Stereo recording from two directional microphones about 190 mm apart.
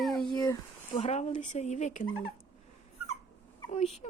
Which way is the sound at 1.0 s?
35° left (ahead or behind).